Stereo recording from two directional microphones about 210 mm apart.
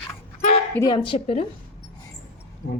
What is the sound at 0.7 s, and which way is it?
Speech, 20° left (ahead or behind).